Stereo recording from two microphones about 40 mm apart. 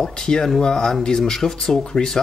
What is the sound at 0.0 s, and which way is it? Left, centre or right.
Speech, centre.